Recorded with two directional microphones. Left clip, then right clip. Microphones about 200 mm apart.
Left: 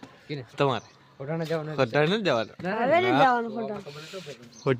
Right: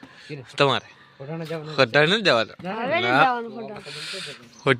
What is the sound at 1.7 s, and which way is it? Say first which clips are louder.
Speech: right 7 dB; 10° right (ahead or behind).